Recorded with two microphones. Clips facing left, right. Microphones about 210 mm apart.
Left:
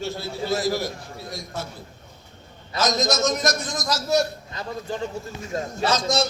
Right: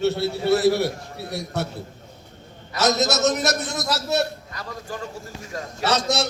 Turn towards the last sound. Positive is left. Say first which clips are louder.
# even
turn(degrees=-70)  # may be behind; listen again after turning